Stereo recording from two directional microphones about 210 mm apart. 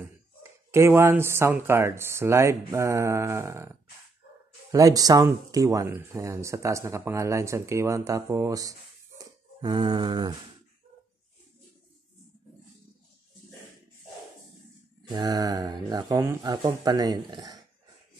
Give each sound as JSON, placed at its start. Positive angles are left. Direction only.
{"t": 0.4, "sound": "speech", "side_deg": -10}
{"t": 4.7, "sound": "speech", "side_deg": -15}
{"t": 15.0, "sound": "speech", "side_deg": -20}